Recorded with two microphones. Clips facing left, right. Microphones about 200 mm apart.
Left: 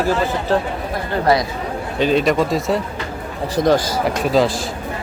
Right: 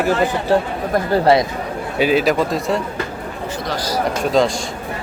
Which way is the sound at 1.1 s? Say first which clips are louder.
Right 2 dB; 30° right (ahead or behind).